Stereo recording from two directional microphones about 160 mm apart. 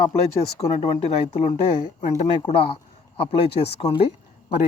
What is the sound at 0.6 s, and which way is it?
Speech, 45° left (ahead or behind).